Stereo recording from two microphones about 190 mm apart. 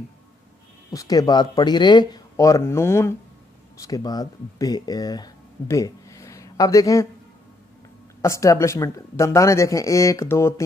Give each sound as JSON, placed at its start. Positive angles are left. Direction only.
{"t": 0.9, "sound": "speech", "side_deg": 20}
{"t": 8.2, "sound": "speech", "side_deg": 15}